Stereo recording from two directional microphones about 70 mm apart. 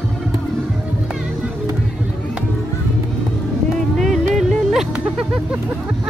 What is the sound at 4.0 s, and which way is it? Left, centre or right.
Music, centre.